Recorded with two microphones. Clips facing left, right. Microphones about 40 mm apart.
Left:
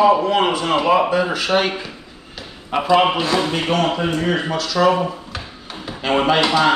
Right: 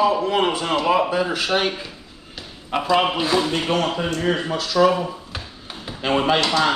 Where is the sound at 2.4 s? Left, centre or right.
Centre.